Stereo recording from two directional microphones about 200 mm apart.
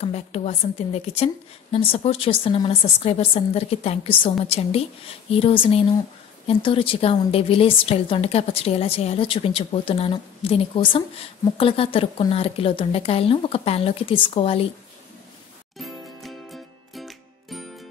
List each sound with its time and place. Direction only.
0.0 s a woman's voice: 30° left (ahead or behind)
15.8 s music: centre (ahead or behind)